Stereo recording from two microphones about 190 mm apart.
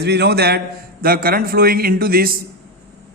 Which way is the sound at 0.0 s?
60° right (ahead or behind).